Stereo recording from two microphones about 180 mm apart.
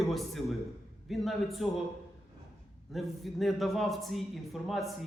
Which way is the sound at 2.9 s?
Centre (ahead or behind).